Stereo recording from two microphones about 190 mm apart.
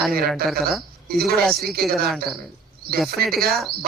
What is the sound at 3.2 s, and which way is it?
Speech, 55° right (ahead or behind).